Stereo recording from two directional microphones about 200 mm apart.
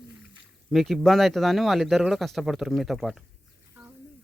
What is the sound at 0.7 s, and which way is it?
Speech, centre (ahead or behind).